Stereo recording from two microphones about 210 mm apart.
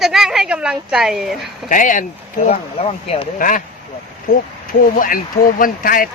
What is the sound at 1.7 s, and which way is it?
Speech, 40° left (ahead or behind).